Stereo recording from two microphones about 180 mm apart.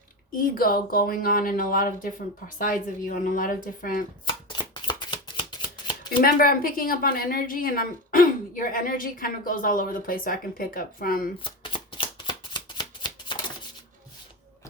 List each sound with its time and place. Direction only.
0.3 s a woman's voice: 50° left (ahead or behind)
4.3 s chopping: 25° left (ahead or behind)
6.2 s a woman's voice: 55° left (ahead or behind)
11.4 s shuffling cards: 25° left (ahead or behind)